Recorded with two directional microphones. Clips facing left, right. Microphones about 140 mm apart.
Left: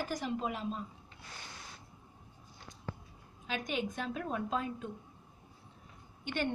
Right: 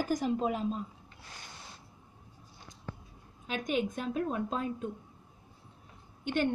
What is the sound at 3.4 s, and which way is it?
A woman's voice, 45° right (ahead or behind).